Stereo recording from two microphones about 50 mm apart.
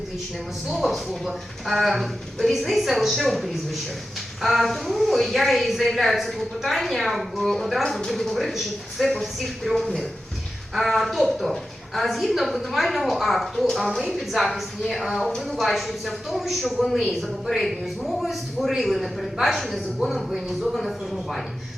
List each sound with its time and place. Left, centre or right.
0.7 s a man's voice: centre